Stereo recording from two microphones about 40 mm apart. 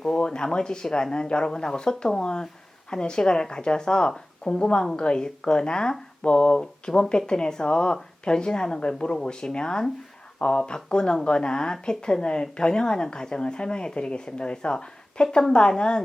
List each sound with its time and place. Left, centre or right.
0.1 s speech: left